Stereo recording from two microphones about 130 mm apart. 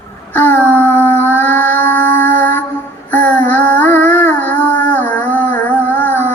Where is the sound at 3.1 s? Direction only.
10° left (ahead or behind).